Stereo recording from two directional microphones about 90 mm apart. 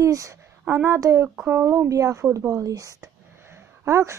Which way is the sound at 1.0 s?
35° right (ahead or behind).